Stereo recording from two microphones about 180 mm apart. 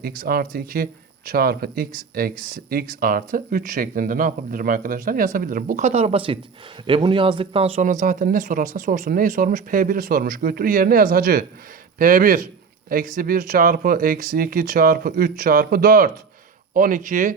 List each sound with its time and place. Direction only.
0.0 s speech: 55° right (ahead or behind)